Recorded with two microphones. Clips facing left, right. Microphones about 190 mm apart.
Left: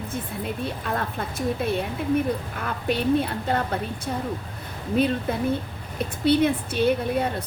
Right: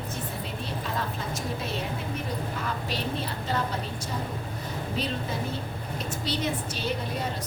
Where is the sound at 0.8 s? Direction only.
55° left (ahead or behind).